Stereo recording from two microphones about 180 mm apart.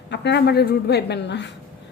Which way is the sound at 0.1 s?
70° left (ahead or behind).